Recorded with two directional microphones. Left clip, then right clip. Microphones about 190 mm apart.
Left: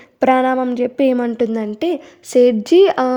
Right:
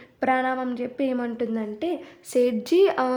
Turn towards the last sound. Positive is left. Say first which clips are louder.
# left 8 dB
turn(degrees=40)  # may be behind; listen again after turning